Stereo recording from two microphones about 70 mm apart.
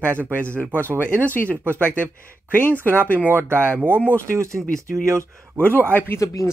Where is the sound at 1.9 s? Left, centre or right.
Left.